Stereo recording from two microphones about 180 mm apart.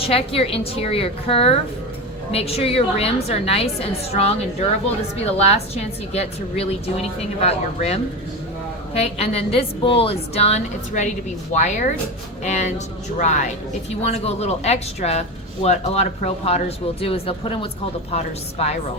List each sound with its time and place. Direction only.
0.0 s a woman's voice: 30° left (ahead or behind)
5.7 s a woman's voice: 35° left (ahead or behind)